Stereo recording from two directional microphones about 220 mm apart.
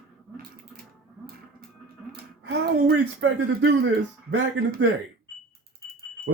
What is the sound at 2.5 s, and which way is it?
Speech, 45° right (ahead or behind).